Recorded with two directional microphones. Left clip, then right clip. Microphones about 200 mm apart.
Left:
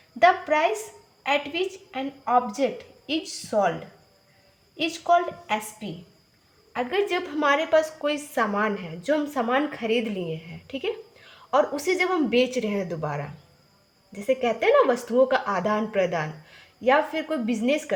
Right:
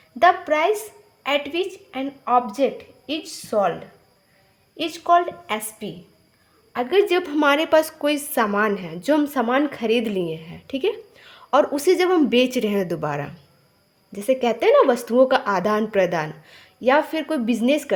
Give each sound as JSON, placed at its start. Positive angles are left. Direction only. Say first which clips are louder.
{"t": 0.2, "sound": "a woman's voice", "louder": "right 2 dB", "side_deg": -40}
{"t": 4.8, "sound": "a woman's voice", "louder": "right 3 dB", "side_deg": -35}